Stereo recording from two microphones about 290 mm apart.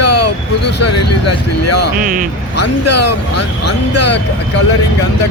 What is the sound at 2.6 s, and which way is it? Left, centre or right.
Speech, left.